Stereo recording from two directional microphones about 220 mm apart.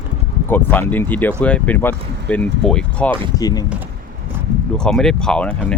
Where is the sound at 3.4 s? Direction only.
15° left (ahead or behind).